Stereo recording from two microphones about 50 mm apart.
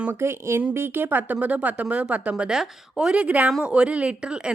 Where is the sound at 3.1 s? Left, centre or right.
Right.